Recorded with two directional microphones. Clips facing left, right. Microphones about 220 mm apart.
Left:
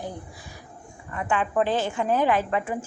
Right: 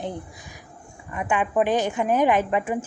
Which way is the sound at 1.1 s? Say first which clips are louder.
Right 2 dB; 15° right (ahead or behind).